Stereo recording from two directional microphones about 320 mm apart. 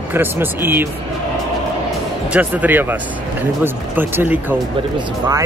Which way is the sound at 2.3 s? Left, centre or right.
Centre.